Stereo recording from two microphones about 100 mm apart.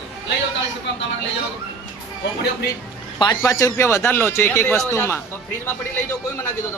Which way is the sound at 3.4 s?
30° left (ahead or behind).